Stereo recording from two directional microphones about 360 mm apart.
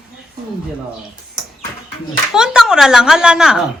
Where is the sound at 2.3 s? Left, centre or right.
Centre.